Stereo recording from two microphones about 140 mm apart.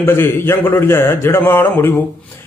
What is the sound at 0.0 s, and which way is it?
A man's voice, 15° left (ahead or behind).